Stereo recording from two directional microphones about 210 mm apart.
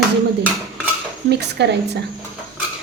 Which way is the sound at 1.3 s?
55° right (ahead or behind).